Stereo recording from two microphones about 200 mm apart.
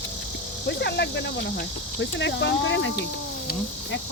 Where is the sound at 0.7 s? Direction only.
55° left (ahead or behind).